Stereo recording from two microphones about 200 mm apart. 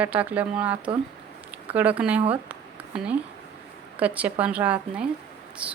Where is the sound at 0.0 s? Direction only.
5° right (ahead or behind).